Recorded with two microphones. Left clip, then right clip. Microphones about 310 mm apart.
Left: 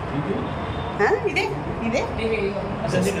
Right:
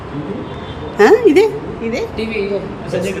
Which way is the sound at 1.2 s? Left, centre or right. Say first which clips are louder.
Right 13 dB; centre.